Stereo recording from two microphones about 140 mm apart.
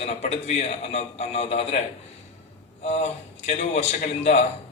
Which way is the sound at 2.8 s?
50° left (ahead or behind).